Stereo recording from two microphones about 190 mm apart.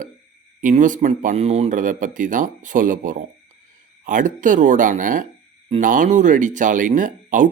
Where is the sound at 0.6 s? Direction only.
40° right (ahead or behind).